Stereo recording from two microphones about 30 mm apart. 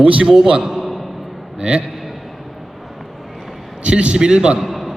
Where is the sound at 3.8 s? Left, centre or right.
Right.